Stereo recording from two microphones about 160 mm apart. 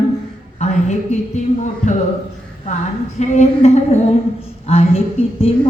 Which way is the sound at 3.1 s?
45° left (ahead or behind).